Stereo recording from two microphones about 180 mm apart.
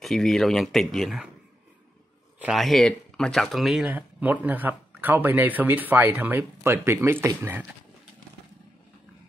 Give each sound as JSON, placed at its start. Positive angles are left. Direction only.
{"t": 0.0, "sound": "speech", "side_deg": 0}
{"t": 2.3, "sound": "speech", "side_deg": -5}